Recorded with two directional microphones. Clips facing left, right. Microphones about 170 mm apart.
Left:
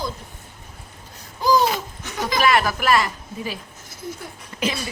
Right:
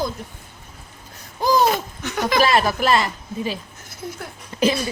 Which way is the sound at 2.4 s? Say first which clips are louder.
Right 1 dB; 30° right (ahead or behind).